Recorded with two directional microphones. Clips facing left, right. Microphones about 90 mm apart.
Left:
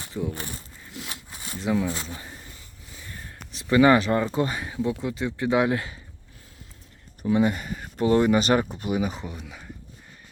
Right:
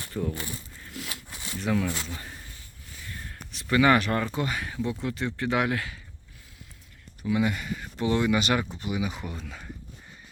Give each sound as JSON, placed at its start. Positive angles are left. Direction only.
{"t": 0.0, "sound": "a sound", "side_deg": 15}
{"t": 1.0, "sound": "zipper", "side_deg": 30}
{"t": 2.0, "sound": "speech", "side_deg": 20}
{"t": 3.5, "sound": "speech", "side_deg": 25}
{"t": 4.9, "sound": "speech", "side_deg": 15}
{"t": 7.3, "sound": "speech", "side_deg": 35}
{"t": 9.2, "sound": "speech", "side_deg": 15}